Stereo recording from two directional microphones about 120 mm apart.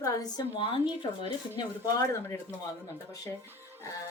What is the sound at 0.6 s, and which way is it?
Speech, 45° left (ahead or behind).